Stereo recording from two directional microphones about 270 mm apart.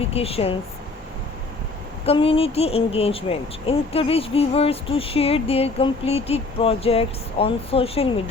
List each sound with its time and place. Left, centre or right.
0.0 s speech: left
2.0 s speech: centre